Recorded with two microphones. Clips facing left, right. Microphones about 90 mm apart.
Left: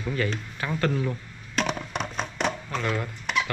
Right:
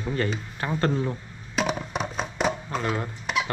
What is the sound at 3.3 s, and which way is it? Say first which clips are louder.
Cough: even; centre (ahead or behind).